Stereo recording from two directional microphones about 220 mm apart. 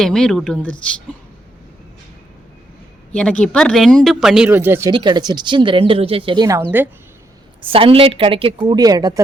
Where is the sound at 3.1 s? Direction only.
5° left (ahead or behind).